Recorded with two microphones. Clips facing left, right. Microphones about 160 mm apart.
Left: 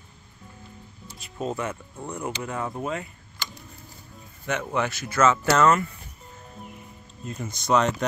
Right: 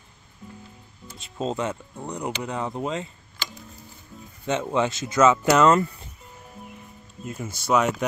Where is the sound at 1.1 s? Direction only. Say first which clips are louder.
Right 2 dB; 25° right (ahead or behind).